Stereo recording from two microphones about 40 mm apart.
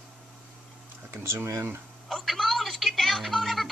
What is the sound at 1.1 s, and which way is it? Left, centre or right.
Speech, right.